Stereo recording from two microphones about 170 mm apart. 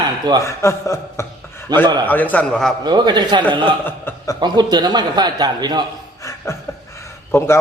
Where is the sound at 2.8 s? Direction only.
25° right (ahead or behind).